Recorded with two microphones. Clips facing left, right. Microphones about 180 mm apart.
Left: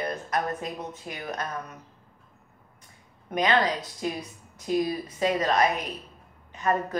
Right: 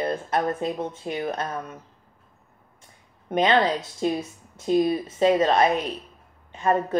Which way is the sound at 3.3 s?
25° right (ahead or behind).